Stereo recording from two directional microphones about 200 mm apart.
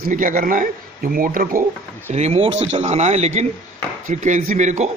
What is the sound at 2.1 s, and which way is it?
A man's voice, 30° right (ahead or behind).